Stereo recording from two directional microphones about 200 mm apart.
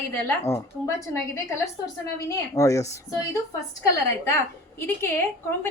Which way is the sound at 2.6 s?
15° left (ahead or behind).